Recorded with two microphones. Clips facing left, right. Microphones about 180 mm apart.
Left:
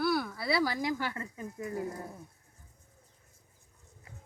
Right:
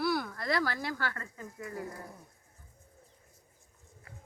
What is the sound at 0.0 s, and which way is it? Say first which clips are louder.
Speech: left 1 dB; centre (ahead or behind).